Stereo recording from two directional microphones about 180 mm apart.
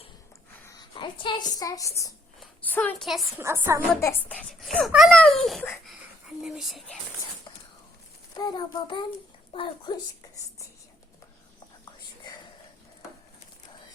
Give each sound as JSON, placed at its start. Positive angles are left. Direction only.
{"t": 0.7, "sound": "a woman's voice", "side_deg": 25}
{"t": 2.4, "sound": "a woman's voice", "side_deg": 10}
{"t": 3.1, "sound": "a woman's voice", "side_deg": -10}
{"t": 4.0, "sound": "a child's voice", "side_deg": 10}
{"t": 8.4, "sound": "a child's voice", "side_deg": 20}